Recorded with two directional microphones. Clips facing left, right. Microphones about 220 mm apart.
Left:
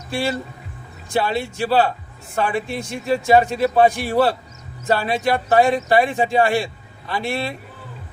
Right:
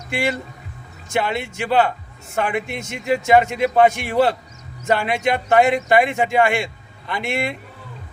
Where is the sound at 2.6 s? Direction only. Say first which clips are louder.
Even; 20° right (ahead or behind).